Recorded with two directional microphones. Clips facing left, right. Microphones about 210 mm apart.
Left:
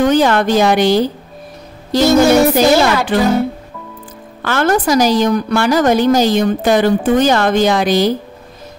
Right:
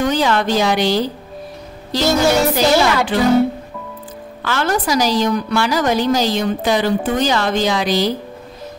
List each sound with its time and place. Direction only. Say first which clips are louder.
0.0 s a woman's voice: left 5 dB; 50° left (ahead or behind)
4.4 s a woman's voice: left 5 dB; 50° left (ahead or behind)